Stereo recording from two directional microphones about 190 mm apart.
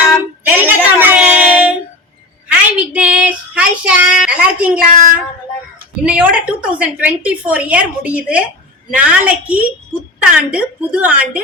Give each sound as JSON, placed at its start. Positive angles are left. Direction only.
{"t": 0.0, "sound": "a sound", "side_deg": -5}
{"t": 2.5, "sound": "child singing", "side_deg": -10}
{"t": 4.9, "sound": "speech", "side_deg": -40}
{"t": 6.1, "sound": "a woman's voice", "side_deg": -5}